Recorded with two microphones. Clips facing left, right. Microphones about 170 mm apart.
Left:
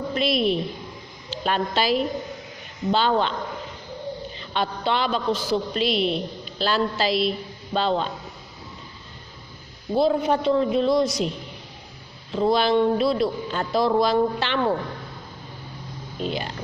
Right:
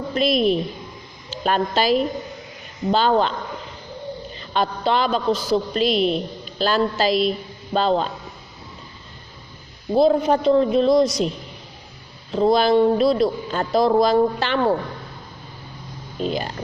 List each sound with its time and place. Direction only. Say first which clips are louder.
0.1 s a woman's voice: right 4 dB; 45° right (ahead or behind)
4.4 s a woman's voice: right 5 dB; 40° right (ahead or behind)
9.9 s a man's voice: right 4 dB; 40° right (ahead or behind)
12.3 s a man's voice: right 3 dB; 40° right (ahead or behind)
16.2 s a man's voice: right 4 dB; 40° right (ahead or behind)